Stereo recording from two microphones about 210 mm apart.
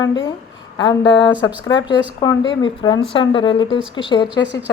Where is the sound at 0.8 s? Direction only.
20° left (ahead or behind).